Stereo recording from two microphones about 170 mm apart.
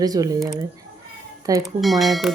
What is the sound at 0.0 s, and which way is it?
Speech, 20° right (ahead or behind).